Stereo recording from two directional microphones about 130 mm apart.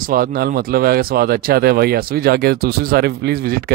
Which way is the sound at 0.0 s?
90° right.